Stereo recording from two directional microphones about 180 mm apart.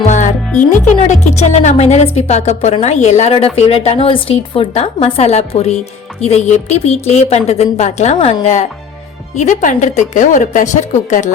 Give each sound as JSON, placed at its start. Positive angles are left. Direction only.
{"t": 0.9, "sound": "speech", "side_deg": 40}